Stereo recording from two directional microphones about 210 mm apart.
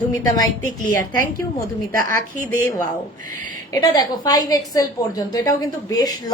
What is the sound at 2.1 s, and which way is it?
A woman's voice, 15° left (ahead or behind).